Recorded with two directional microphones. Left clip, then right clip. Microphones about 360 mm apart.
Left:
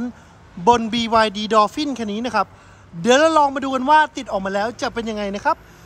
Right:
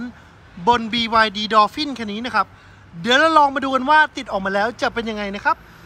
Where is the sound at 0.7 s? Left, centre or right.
Centre.